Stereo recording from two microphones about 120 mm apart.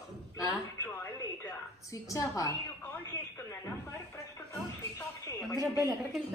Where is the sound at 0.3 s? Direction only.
20° left (ahead or behind).